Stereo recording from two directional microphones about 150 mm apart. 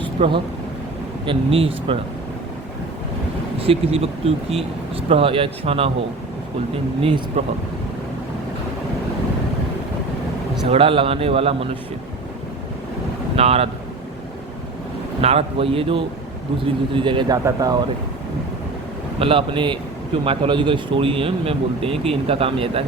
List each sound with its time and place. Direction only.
0.0 s a sound: 35° right (ahead or behind)
1.2 s speech: 35° right (ahead or behind)
3.6 s speech: 40° right (ahead or behind)
7.0 s speech: 40° right (ahead or behind)
10.7 s speech: 35° right (ahead or behind)
13.3 s speech: 40° right (ahead or behind)
15.2 s speech: 40° right (ahead or behind); by 17.7 s 25° right (ahead or behind)
19.2 s speech: 35° right (ahead or behind)